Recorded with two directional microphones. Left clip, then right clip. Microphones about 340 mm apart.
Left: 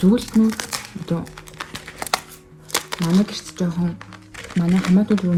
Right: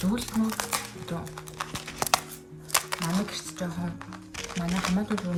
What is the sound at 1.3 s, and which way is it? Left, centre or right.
Music, centre.